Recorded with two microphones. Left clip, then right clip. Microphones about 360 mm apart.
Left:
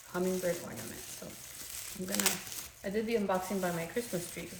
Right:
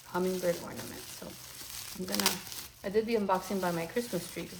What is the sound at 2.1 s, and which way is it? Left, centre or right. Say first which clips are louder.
Speech: right 2 dB; centre.